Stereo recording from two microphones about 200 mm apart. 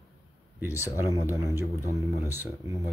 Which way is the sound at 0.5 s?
10° right (ahead or behind).